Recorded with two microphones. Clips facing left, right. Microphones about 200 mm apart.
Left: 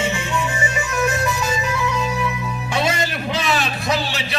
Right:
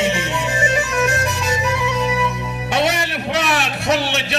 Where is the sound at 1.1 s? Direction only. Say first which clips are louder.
Right 1 dB; 75° right (ahead or behind).